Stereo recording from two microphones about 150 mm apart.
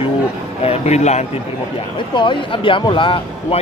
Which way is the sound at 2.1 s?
35° left (ahead or behind).